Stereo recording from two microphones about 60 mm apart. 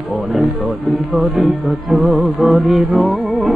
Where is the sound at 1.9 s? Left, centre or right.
Right.